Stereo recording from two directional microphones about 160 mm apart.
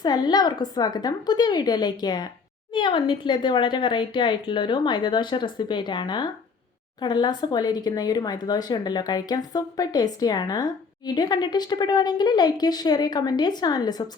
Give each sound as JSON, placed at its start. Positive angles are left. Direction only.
{"t": 0.0, "sound": "speech", "side_deg": 25}